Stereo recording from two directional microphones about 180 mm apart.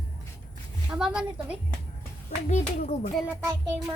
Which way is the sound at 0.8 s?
5° right (ahead or behind).